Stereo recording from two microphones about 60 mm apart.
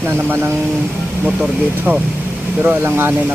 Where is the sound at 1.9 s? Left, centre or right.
Right.